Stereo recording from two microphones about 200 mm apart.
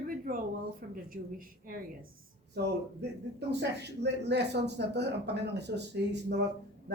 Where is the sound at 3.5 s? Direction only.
55° right (ahead or behind).